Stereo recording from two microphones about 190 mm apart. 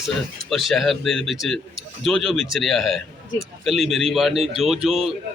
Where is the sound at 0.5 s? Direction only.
Centre (ahead or behind).